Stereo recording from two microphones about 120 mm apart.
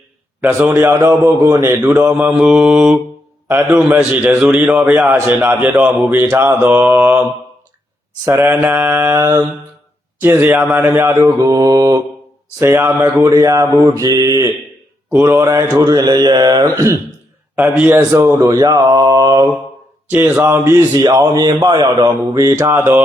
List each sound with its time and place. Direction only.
0.4 s a man's voice: 20° right (ahead or behind)
12.5 s speech: 20° right (ahead or behind)
13.3 s speech: 30° right (ahead or behind)
15.1 s speech: 20° right (ahead or behind)
17.5 s a man's voice: 15° right (ahead or behind); by 19.5 s 35° right (ahead or behind)
20.1 s speech: 20° right (ahead or behind)
20.9 s speech: 35° right (ahead or behind)